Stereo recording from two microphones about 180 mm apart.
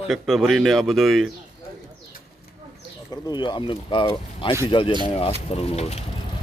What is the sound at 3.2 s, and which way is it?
Speech, 25° left (ahead or behind).